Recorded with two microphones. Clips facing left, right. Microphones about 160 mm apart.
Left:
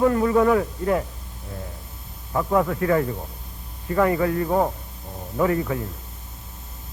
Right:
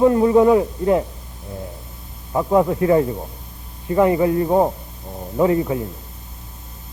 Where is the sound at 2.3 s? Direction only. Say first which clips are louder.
Right 4 dB; 25° right (ahead or behind).